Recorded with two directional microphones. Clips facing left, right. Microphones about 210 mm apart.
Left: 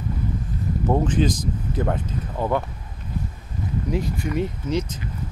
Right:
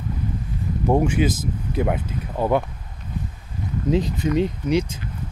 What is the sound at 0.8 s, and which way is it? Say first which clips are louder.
Speech: right 2 dB; 10° right (ahead or behind).